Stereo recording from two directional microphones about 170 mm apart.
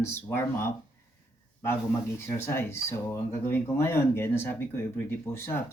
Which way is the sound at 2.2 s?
15° left (ahead or behind).